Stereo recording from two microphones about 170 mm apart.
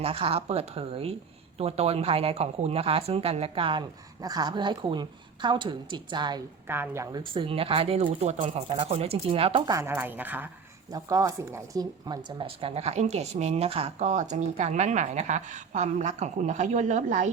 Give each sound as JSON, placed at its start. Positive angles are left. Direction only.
{"t": 0.0, "sound": "speech", "side_deg": -35}
{"t": 6.7, "sound": "a woman's voice", "side_deg": -15}
{"t": 7.2, "sound": "speech", "side_deg": -30}
{"t": 9.7, "sound": "a woman's voice", "side_deg": -15}